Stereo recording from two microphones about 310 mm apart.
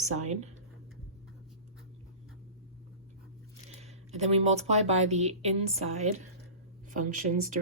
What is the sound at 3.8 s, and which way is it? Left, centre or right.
A woman's voice, right.